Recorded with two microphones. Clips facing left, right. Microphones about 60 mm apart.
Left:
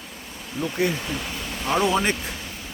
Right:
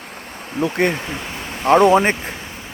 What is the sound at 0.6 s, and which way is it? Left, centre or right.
Speech, right.